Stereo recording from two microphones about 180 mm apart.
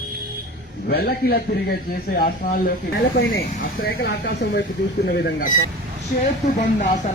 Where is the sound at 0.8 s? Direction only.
60° left (ahead or behind).